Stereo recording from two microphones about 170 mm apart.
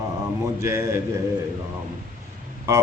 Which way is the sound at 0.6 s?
15° right (ahead or behind).